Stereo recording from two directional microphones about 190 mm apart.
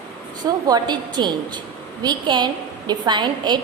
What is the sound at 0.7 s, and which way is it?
A woman's voice, 20° right (ahead or behind).